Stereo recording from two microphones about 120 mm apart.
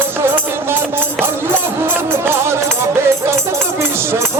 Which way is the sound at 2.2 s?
20° right (ahead or behind).